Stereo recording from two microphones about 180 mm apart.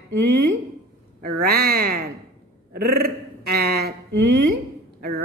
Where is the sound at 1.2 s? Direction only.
60° right (ahead or behind).